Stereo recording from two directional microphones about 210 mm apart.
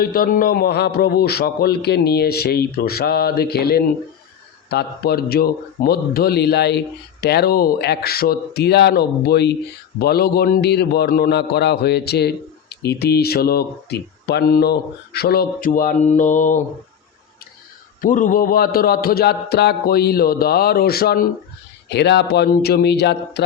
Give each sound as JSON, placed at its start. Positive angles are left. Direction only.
{"t": 0.0, "sound": "a man's voice", "side_deg": 45}
{"t": 18.0, "sound": "a man's voice", "side_deg": 40}